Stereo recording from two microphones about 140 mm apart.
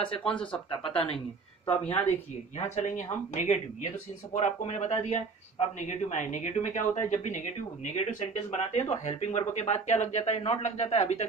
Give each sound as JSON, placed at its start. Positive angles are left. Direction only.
{"t": 0.2, "sound": "speech", "side_deg": 5}
{"t": 0.7, "sound": "speech", "side_deg": 40}
{"t": 1.8, "sound": "speech", "side_deg": 55}